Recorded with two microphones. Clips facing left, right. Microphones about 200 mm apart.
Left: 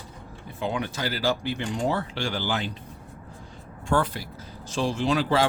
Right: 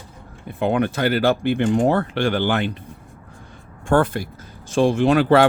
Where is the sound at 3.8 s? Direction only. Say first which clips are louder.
Right 7 dB; 50° right (ahead or behind).